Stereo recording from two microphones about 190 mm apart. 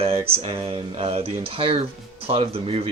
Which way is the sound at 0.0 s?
30° right (ahead or behind).